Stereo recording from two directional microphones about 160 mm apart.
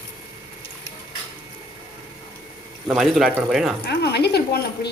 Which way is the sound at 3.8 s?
90° left.